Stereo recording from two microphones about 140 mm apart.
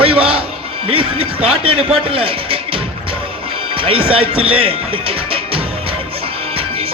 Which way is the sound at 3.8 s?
40° right (ahead or behind).